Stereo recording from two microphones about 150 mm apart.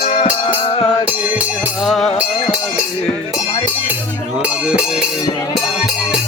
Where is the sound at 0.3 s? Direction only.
35° left (ahead or behind).